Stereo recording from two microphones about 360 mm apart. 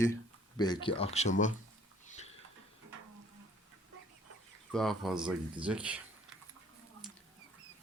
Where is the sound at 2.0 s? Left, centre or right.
Centre.